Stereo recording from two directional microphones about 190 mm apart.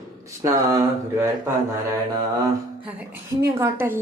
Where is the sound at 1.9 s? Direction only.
20° right (ahead or behind).